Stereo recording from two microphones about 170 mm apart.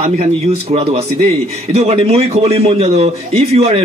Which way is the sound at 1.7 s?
35° right (ahead or behind).